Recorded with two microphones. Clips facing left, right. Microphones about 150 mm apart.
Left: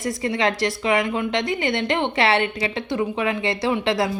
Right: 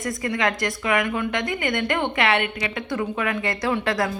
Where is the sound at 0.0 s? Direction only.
30° left (ahead or behind).